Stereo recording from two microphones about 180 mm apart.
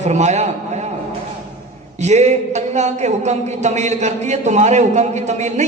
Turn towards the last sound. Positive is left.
turn(degrees=-40)  # may be behind; listen again after turning